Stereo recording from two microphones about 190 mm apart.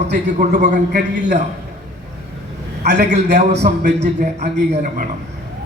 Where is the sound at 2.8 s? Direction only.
60° right (ahead or behind).